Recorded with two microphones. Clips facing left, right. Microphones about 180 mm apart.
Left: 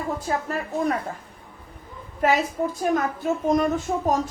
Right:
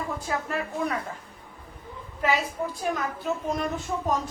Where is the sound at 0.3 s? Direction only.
35° left (ahead or behind).